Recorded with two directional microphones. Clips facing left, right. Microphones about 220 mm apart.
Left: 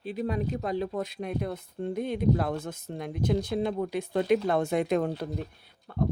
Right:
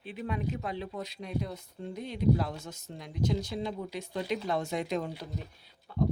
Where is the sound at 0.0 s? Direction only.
40° left (ahead or behind).